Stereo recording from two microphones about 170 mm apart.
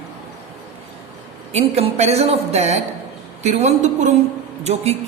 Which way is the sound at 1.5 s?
40° right (ahead or behind).